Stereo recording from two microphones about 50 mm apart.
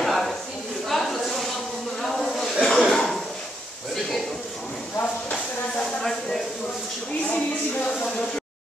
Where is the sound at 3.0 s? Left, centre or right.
Centre.